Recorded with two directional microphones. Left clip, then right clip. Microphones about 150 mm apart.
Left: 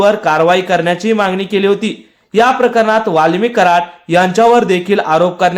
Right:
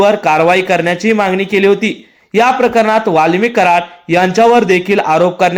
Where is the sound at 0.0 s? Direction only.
20° right (ahead or behind).